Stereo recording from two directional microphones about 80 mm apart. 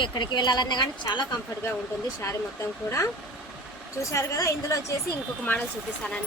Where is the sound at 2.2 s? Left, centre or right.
Left.